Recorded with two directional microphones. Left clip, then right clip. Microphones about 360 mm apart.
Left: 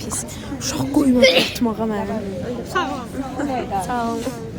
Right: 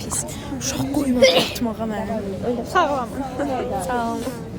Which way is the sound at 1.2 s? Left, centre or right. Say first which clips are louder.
Even; right.